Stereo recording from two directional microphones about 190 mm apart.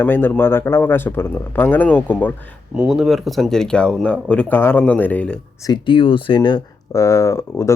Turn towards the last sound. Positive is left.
turn(degrees=15)  # may be behind; listen again after turning